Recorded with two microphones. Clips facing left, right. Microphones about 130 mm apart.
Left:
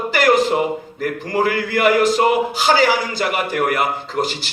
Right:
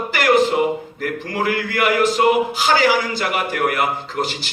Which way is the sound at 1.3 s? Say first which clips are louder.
Left 4 dB; 45° left (ahead or behind).